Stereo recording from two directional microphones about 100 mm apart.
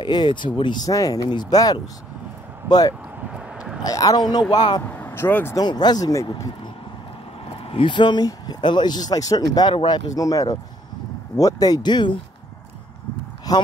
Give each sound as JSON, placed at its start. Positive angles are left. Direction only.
{"t": 0.0, "sound": "speech", "side_deg": 50}
{"t": 0.8, "sound": "speech", "side_deg": 35}
{"t": 3.2, "sound": "a sound", "side_deg": -10}
{"t": 3.8, "sound": "speech", "side_deg": 35}
{"t": 4.8, "sound": "speech", "side_deg": 20}
{"t": 5.6, "sound": "speech", "side_deg": 45}
{"t": 7.5, "sound": "speech", "side_deg": 65}
{"t": 13.5, "sound": "speech", "side_deg": 40}